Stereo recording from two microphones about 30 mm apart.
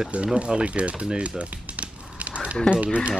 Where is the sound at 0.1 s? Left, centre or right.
Right.